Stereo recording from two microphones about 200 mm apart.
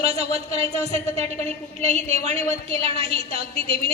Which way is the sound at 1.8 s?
35° right (ahead or behind).